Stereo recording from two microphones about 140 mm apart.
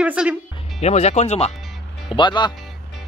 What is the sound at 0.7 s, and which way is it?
Speech, 50° left (ahead or behind).